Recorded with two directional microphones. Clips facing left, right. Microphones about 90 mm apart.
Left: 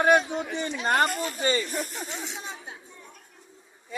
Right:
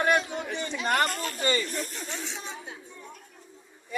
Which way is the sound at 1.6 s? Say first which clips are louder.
Left 2 dB; 10° left (ahead or behind).